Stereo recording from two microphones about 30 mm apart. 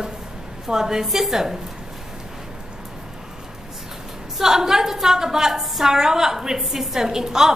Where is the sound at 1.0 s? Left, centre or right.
Centre.